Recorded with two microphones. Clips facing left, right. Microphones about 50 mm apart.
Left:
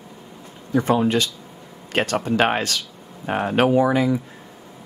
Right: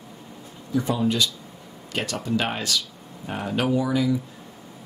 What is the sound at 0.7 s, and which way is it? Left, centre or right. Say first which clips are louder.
Speech: left 5 dB; left.